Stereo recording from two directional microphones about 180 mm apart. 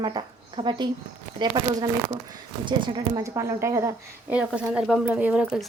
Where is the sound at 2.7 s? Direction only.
25° right (ahead or behind).